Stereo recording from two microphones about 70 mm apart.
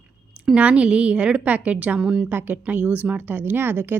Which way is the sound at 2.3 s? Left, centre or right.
Right.